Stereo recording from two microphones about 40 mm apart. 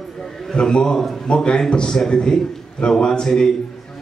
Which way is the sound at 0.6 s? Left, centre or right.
Left.